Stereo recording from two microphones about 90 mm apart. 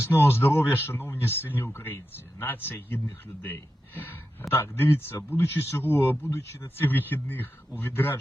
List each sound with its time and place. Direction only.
0.0 s speech: 25° left (ahead or behind)